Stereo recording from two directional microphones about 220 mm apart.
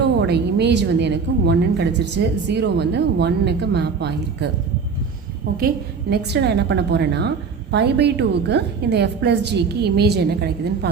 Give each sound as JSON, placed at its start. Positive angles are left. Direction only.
{"t": 0.2, "sound": "a woman's voice", "side_deg": -50}
{"t": 5.5, "sound": "a woman's voice", "side_deg": -45}